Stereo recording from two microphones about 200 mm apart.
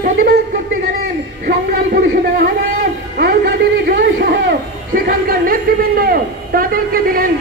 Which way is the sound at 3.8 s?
55° right (ahead or behind).